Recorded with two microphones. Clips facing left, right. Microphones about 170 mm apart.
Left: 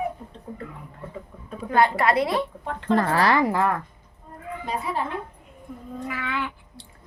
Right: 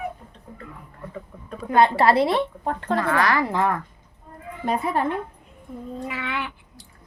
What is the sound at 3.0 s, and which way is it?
Speech, 30° left (ahead or behind).